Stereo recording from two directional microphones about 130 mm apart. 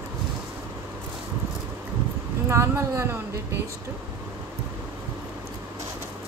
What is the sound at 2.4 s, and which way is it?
Speech, 20° right (ahead or behind).